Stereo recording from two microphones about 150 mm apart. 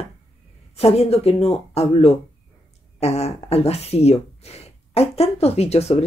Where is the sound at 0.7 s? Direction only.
45° left (ahead or behind).